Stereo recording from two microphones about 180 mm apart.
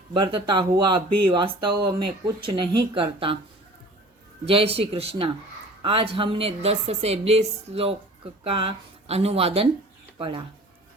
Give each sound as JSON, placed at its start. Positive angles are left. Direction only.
{"t": 0.1, "sound": "speech", "side_deg": -30}
{"t": 4.4, "sound": "a woman's voice", "side_deg": -30}